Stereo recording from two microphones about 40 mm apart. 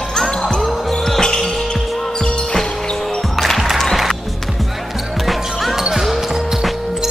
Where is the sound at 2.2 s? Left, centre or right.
Left.